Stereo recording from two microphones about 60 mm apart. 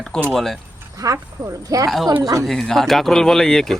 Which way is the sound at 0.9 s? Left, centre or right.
Right.